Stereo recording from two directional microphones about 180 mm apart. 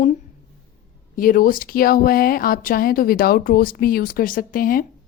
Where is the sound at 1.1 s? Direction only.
50° left (ahead or behind).